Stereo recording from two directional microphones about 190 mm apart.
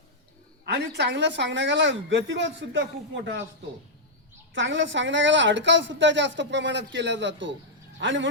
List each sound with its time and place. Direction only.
0.7 s a woman's voice: 65° right (ahead or behind)
4.5 s a woman's voice: 75° right (ahead or behind)